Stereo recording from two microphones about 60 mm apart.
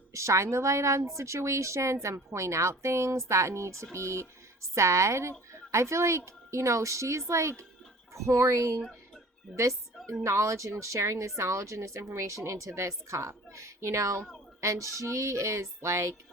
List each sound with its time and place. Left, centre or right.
0.1 s a woman's voice: right
9.5 s speech: centre
10.2 s a woman's voice: right